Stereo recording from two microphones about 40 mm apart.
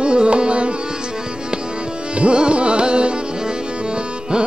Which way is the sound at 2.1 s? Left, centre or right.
Right.